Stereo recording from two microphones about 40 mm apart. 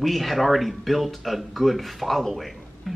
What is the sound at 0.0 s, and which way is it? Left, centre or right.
A woman's voice, centre.